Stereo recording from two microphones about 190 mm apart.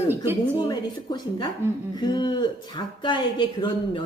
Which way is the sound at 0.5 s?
25° left (ahead or behind).